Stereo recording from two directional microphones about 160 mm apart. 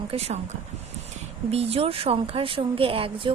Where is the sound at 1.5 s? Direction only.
40° right (ahead or behind).